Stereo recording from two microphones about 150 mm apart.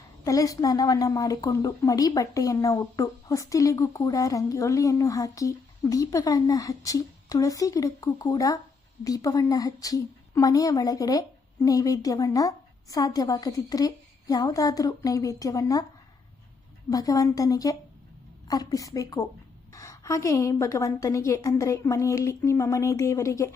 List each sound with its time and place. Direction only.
0.3 s a woman's voice: 20° left (ahead or behind)
16.9 s a woman's voice: 25° left (ahead or behind)